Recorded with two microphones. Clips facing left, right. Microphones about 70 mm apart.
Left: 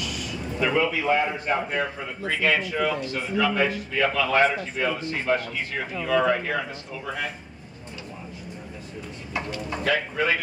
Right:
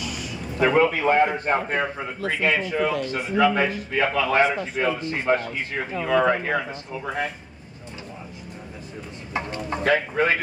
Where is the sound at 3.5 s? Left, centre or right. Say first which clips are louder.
Right 1 dB; right.